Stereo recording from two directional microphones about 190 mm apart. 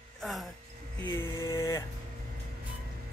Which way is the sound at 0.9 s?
10° left (ahead or behind).